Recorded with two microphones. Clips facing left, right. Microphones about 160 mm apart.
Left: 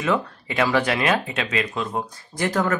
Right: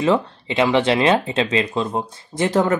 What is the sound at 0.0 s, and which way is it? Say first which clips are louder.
Speech: right 5 dB; 25° right (ahead or behind).